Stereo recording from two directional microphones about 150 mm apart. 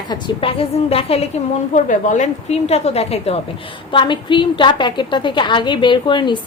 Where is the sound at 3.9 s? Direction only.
30° left (ahead or behind).